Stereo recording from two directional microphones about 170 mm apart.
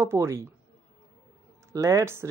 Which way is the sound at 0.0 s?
15° right (ahead or behind).